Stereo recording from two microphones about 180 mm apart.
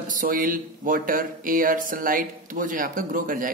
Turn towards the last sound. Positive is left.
turn(degrees=-50)  # may be behind; listen again after turning